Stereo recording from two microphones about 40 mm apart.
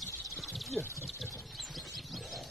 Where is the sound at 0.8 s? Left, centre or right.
Left.